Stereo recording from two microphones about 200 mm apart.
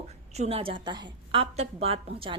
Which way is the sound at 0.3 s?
30° right (ahead or behind).